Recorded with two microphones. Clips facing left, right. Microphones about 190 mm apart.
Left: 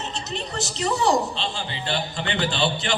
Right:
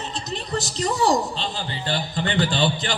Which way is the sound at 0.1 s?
35° right (ahead or behind).